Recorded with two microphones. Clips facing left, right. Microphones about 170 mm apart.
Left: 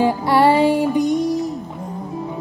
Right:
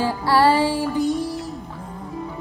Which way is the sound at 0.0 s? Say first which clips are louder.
Left 3 dB; 20° left (ahead or behind).